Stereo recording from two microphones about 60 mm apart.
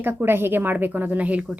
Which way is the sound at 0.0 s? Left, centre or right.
Right.